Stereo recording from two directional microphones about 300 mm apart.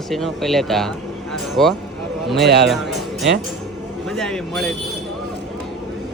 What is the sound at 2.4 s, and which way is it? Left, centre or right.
Speech, right.